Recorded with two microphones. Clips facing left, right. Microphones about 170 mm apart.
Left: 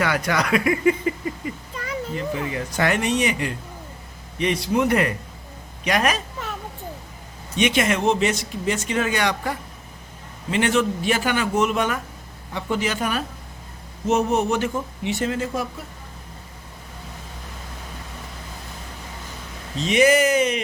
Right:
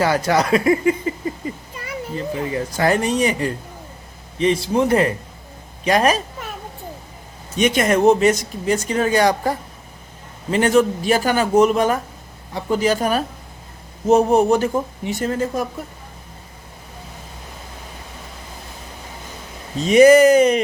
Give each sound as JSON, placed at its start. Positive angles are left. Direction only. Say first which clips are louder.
{"t": 0.0, "sound": "a sound", "louder": "right 5 dB", "side_deg": -30}
{"t": 2.1, "sound": "speech", "louder": "right 5 dB", "side_deg": -35}
{"t": 7.5, "sound": "speech", "louder": "right 4 dB", "side_deg": -45}
{"t": 19.7, "sound": "speech", "louder": "right 7 dB", "side_deg": -40}